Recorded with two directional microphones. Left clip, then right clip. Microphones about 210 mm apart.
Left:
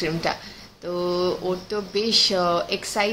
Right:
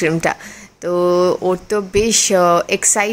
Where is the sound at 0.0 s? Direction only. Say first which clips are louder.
Right 8 dB; 45° right (ahead or behind).